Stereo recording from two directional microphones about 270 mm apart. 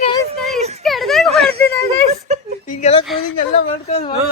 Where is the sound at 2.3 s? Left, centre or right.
Right.